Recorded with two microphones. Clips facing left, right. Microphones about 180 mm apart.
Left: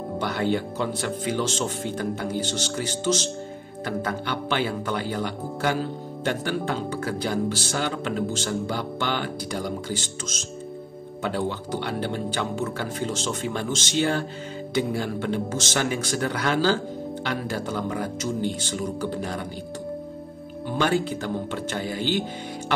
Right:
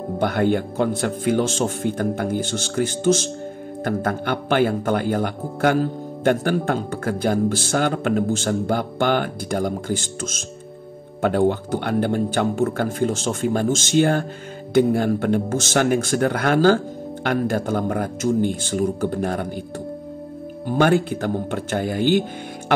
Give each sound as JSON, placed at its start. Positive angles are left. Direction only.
{"t": 0.2, "sound": "speech", "side_deg": -55}
{"t": 20.6, "sound": "speech", "side_deg": -50}